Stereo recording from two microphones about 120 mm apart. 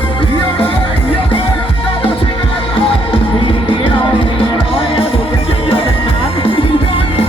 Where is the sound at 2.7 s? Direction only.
50° left (ahead or behind).